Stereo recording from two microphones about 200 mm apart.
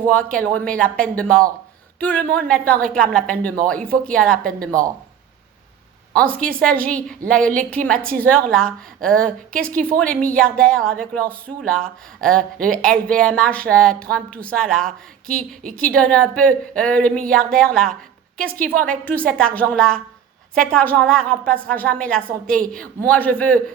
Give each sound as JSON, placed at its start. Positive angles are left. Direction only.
{"t": 0.1, "sound": "speech", "side_deg": 5}
{"t": 6.1, "sound": "speech", "side_deg": 5}
{"t": 14.8, "sound": "speech", "side_deg": -45}
{"t": 15.8, "sound": "a woman's voice", "side_deg": 5}